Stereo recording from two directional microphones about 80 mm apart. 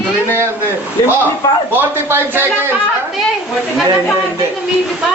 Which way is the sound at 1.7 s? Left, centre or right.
Right.